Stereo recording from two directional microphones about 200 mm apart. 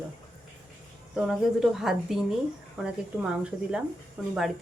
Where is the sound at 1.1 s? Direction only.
5° right (ahead or behind).